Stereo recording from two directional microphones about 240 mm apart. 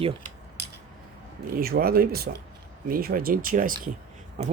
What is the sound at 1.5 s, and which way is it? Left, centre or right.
Speech, right.